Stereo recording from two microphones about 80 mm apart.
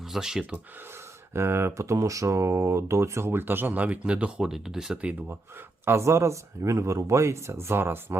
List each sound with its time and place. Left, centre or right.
0.1 s speech: centre
1.3 s speech: right; by 5.1 s centre
5.8 s speech: right